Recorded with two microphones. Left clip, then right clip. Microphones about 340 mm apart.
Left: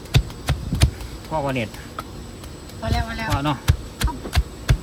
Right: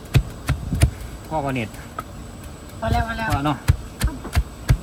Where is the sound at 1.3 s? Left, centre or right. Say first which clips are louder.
Left 1 dB; centre.